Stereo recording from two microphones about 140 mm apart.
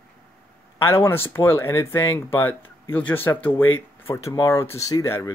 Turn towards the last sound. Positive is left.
turn(degrees=20)  # may be behind; listen again after turning